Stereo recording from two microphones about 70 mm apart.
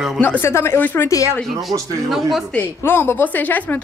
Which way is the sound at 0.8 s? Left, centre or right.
Left.